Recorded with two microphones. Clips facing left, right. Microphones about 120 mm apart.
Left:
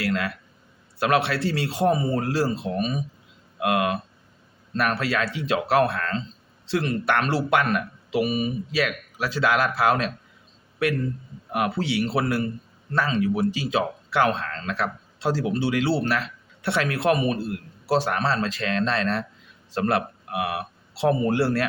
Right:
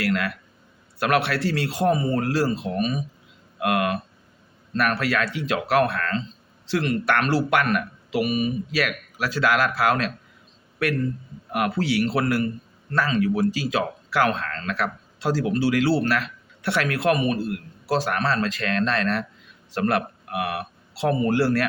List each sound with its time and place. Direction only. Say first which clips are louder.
0.0 s speech: right 1 dB; 30° left (ahead or behind)
2.0 s speech: right 1 dB; 10° left (ahead or behind)
2.2 s speech: right 1 dB; 30° left (ahead or behind)
11.5 s speech: right 1 dB; 25° left (ahead or behind)